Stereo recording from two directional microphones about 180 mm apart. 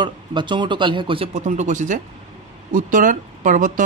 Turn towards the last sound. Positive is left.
turn(degrees=-45)  # may be behind; listen again after turning